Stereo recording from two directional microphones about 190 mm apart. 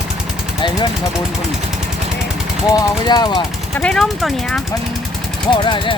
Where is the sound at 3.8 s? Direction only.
5° left (ahead or behind).